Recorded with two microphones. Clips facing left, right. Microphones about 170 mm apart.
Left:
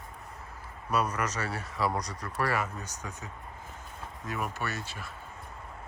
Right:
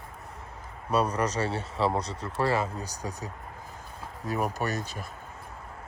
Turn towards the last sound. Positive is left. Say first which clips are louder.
# right 5 dB
turn(degrees=-40)  # may be behind; listen again after turning